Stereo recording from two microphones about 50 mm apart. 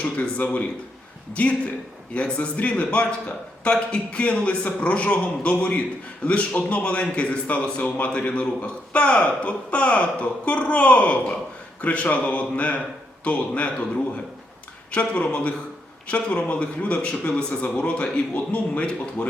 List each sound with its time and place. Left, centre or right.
0.0 s a man's voice: left